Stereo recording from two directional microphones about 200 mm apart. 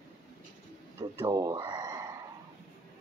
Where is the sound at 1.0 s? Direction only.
20° right (ahead or behind).